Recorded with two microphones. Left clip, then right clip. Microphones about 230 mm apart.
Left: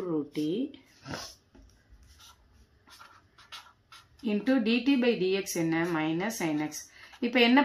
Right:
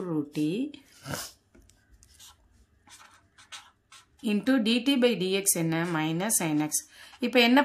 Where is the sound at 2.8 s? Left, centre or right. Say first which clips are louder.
Even; centre.